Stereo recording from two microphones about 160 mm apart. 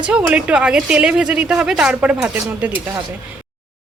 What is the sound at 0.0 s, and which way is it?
Speech, 5° right (ahead or behind).